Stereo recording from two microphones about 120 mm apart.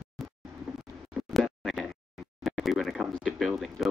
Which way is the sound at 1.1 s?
Centre (ahead or behind).